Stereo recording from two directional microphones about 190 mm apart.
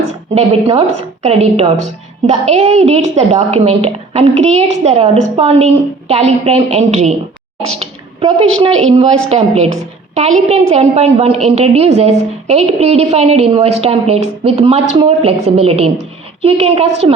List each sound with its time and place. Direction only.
0.3 s a woman's voice: 30° right (ahead or behind)
7.7 s a sound: 35° right (ahead or behind)
8.9 s a woman's voice: 35° right (ahead or behind)